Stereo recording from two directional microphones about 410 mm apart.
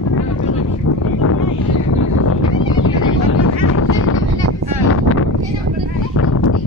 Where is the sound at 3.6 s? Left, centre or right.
Left.